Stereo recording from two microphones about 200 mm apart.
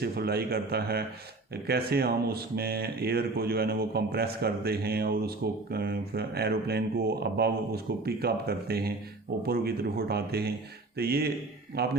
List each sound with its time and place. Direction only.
0.0 s speech: 50° right (ahead or behind)